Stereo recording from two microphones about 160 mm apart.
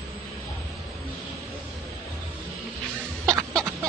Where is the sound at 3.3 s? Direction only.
5° left (ahead or behind).